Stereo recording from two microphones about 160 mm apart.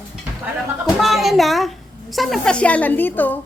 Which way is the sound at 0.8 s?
Centre (ahead or behind).